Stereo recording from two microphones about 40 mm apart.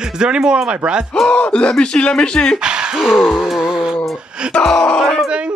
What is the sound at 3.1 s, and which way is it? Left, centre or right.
Speech, centre.